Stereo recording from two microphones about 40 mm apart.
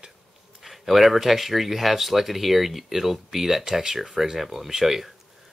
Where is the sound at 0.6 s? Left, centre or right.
Centre.